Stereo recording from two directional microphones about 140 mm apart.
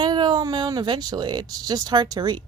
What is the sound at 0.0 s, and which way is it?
A woman's voice, 30° right (ahead or behind).